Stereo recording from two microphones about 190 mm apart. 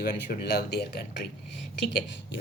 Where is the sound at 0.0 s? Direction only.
55° left (ahead or behind).